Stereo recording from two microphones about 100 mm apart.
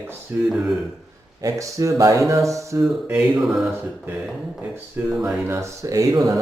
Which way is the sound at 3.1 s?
10° right (ahead or behind).